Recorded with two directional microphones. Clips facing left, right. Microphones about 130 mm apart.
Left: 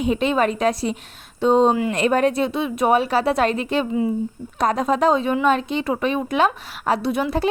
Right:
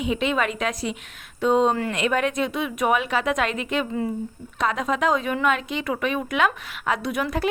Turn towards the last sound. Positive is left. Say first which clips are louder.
# left 4 dB
turn(degrees=30)  # may be behind; listen again after turning